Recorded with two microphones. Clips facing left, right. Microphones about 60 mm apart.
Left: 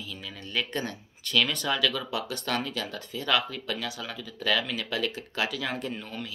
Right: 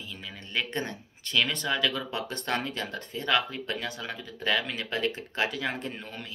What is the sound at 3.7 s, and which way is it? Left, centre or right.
Speech, right.